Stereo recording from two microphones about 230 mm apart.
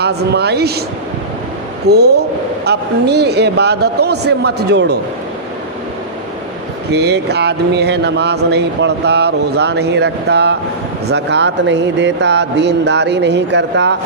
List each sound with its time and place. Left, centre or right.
0.0 s speech: right
1.9 s speech: right
6.9 s speech: right